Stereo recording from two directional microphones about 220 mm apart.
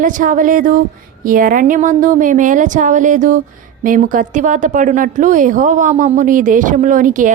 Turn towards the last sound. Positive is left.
turn(degrees=-35)  # may be behind; listen again after turning